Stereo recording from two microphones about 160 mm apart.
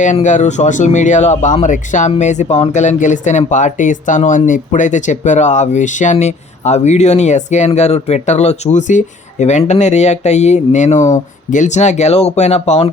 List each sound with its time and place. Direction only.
0.0 s speech: 50° left (ahead or behind)